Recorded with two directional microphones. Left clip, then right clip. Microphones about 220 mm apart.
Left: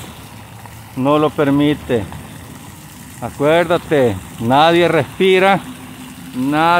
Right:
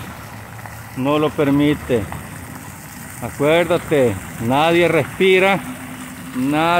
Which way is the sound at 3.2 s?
15° left (ahead or behind).